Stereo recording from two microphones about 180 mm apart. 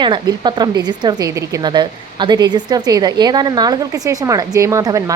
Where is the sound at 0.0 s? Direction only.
25° right (ahead or behind).